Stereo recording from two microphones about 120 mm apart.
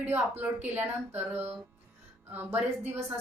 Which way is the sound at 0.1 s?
15° right (ahead or behind).